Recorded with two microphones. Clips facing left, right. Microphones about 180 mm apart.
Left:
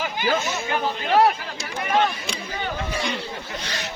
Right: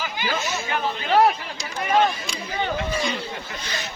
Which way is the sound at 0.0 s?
50° left (ahead or behind).